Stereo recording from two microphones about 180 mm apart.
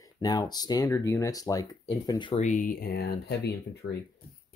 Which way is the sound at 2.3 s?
45° left (ahead or behind).